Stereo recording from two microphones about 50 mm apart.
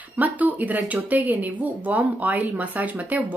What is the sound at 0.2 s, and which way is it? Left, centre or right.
Speech, right.